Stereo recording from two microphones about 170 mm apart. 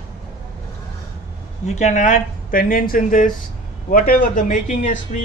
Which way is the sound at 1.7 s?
45° left (ahead or behind).